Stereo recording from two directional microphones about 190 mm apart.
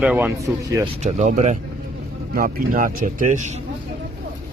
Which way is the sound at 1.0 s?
40° right (ahead or behind).